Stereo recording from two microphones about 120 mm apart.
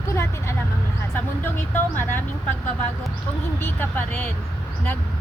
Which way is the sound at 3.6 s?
15° left (ahead or behind).